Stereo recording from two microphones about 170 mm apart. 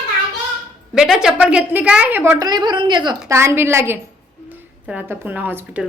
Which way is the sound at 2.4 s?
25° right (ahead or behind).